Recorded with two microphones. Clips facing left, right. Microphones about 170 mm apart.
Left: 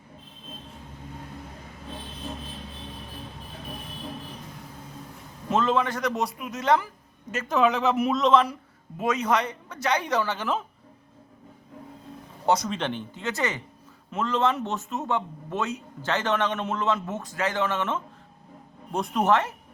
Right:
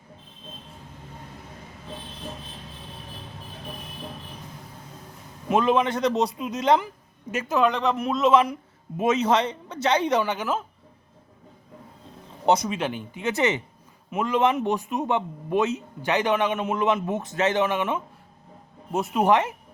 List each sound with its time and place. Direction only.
5.5 s a man's voice: 15° right (ahead or behind)
7.4 s speech: centre (ahead or behind)
8.3 s a man's voice: 10° right (ahead or behind)
9.0 s a man's voice: 25° right (ahead or behind); by 10.7 s 5° right (ahead or behind)
12.5 s a man's voice: 20° right (ahead or behind)
12.7 s a man's voice: 5° right (ahead or behind)